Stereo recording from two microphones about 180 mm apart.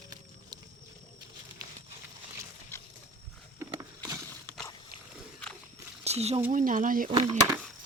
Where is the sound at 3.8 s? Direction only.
20° right (ahead or behind).